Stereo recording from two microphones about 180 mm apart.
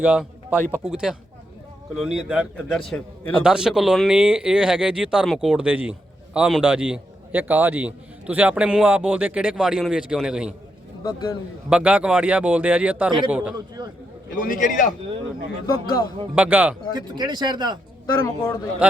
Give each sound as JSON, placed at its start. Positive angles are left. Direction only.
{"t": 0.0, "sound": "a man's voice", "side_deg": -5}
{"t": 11.0, "sound": "a man's voice", "side_deg": 20}
{"t": 11.7, "sound": "speech", "side_deg": -5}
{"t": 13.8, "sound": "speech", "side_deg": -25}
{"t": 14.3, "sound": "a man's voice", "side_deg": 50}
{"t": 16.3, "sound": "speech", "side_deg": -10}
{"t": 16.9, "sound": "speech", "side_deg": -25}
{"t": 18.0, "sound": "speech", "side_deg": 15}
{"t": 18.8, "sound": "speech", "side_deg": -10}